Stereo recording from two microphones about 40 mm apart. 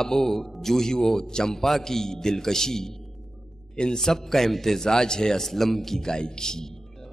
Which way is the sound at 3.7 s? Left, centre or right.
Centre.